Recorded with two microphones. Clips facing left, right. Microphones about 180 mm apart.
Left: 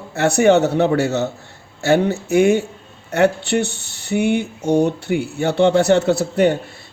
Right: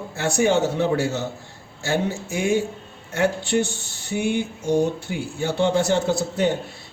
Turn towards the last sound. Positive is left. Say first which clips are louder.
# left 6 dB
turn(degrees=65)  # may be behind; listen again after turning